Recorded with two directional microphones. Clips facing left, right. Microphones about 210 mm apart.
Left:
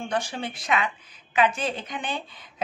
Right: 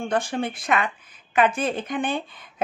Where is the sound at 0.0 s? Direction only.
55° right (ahead or behind).